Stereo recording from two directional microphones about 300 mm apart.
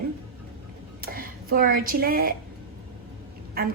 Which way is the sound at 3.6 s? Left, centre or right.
Right.